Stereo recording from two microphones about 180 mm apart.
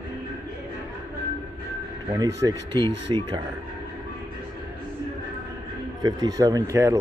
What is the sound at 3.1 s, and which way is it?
Speech, 25° right (ahead or behind).